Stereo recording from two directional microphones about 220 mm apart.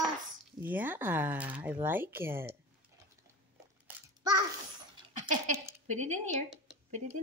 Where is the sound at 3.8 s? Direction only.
15° right (ahead or behind).